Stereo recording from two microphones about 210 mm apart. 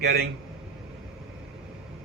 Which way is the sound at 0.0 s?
50° right (ahead or behind).